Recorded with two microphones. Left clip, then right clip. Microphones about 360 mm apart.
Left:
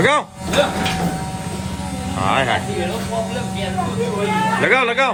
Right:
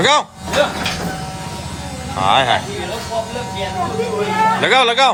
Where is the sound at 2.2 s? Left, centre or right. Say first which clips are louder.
Right 4 dB; centre.